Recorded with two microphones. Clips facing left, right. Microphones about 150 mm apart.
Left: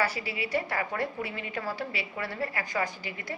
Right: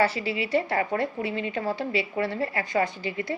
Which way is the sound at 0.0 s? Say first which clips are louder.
Right 6 dB; 25° right (ahead or behind).